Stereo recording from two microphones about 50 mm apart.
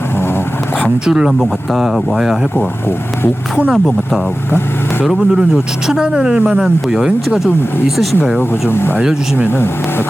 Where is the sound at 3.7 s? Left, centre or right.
Centre.